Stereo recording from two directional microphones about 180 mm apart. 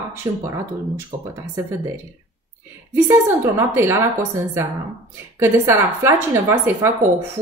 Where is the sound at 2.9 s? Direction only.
15° right (ahead or behind).